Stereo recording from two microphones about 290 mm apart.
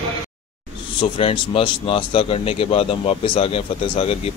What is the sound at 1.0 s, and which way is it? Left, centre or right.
Speech, centre.